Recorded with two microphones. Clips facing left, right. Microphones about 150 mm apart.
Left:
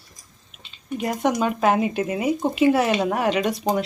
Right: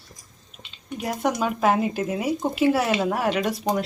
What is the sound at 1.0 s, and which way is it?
Speech, centre (ahead or behind).